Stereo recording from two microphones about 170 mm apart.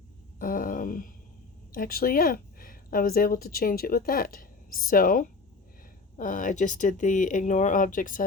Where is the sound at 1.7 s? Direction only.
55° left (ahead or behind).